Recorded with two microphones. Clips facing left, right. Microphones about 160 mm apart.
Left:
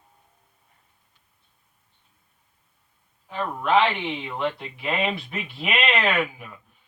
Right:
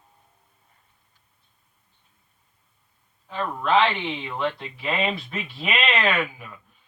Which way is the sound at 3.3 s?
15° left (ahead or behind).